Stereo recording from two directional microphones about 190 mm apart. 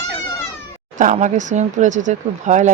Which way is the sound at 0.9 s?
40° right (ahead or behind).